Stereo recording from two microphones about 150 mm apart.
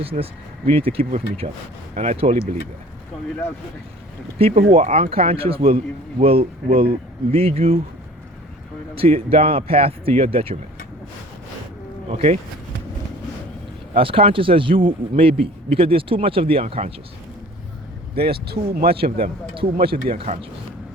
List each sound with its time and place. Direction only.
0.0 s a man's voice: 40° right (ahead or behind)
4.4 s a man's voice: 40° right (ahead or behind)
9.0 s a man's voice: 40° right (ahead or behind)
12.1 s speech: 45° right (ahead or behind)
13.9 s a man's voice: 35° right (ahead or behind)
18.1 s speech: 90° right
19.9 s a man's voice: 35° right (ahead or behind)